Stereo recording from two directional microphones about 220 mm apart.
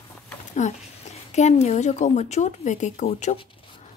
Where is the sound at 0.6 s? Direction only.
35° left (ahead or behind).